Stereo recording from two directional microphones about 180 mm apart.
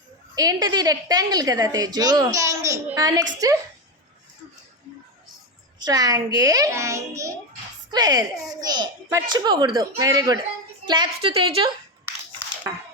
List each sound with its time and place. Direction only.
0.3 s a woman's voice: 20° right (ahead or behind)
5.8 s a woman's voice: 20° right (ahead or behind)